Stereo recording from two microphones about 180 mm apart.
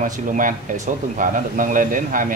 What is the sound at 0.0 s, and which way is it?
A man's voice, 50° right (ahead or behind).